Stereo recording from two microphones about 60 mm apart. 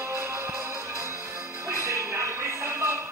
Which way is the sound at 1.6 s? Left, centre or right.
Right.